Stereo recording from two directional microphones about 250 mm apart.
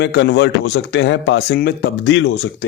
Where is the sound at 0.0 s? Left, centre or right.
Left.